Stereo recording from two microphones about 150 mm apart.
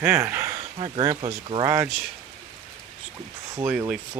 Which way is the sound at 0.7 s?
35° right (ahead or behind).